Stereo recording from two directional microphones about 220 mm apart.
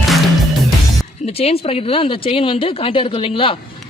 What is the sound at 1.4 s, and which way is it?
Speech, 25° left (ahead or behind).